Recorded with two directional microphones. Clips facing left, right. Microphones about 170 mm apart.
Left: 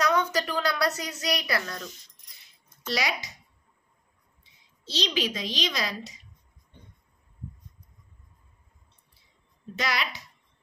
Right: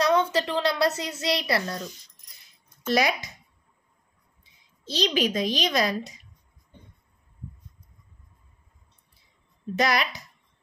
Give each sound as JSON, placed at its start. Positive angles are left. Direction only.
{"t": 0.0, "sound": "speech", "side_deg": -30}
{"t": 2.9, "sound": "a child's voice", "side_deg": -50}
{"t": 4.8, "sound": "a child's voice", "side_deg": -50}
{"t": 9.8, "sound": "a child's voice", "side_deg": -45}